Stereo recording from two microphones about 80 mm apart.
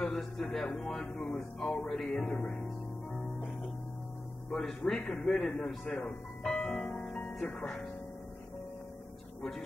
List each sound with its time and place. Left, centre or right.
0.0 s speech: centre
0.7 s music: centre
4.5 s music: centre
5.2 s a man's voice: centre
7.3 s music: centre
9.4 s a man's voice: centre